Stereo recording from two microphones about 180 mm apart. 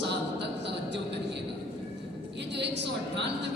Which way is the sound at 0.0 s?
75° right (ahead or behind).